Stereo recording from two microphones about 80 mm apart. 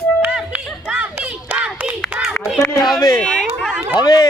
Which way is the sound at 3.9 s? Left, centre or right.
Left.